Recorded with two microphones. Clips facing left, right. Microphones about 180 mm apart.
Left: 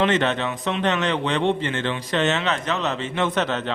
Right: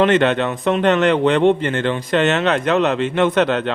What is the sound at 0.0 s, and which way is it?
Speech, 60° right (ahead or behind).